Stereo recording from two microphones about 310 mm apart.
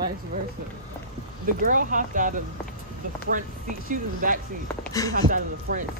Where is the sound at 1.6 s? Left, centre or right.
Right.